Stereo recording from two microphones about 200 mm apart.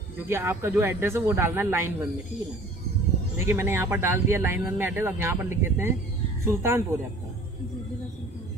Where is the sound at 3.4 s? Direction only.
10° right (ahead or behind).